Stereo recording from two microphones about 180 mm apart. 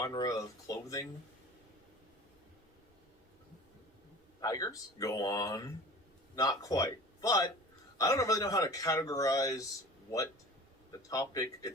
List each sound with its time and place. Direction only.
0.0 s speech: 20° left (ahead or behind)
4.4 s speech: 20° left (ahead or behind)
11.1 s speech: 20° left (ahead or behind)